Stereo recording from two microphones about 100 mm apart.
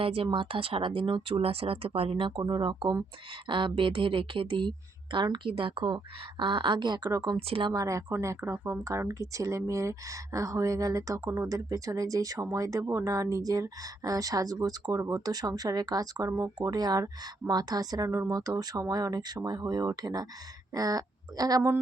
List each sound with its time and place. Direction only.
0.0 s a woman's voice: 65° right (ahead or behind); by 7.3 s 40° right (ahead or behind)
7.3 s speech: 70° right (ahead or behind)
7.7 s speech: 35° right (ahead or behind)